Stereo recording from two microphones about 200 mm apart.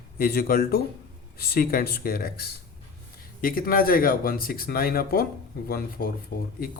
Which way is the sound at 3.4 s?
45° left (ahead or behind).